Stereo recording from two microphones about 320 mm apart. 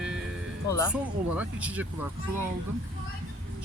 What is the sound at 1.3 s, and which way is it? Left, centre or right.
Speech, centre.